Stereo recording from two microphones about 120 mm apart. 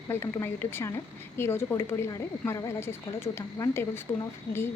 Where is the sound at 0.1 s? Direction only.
20° left (ahead or behind).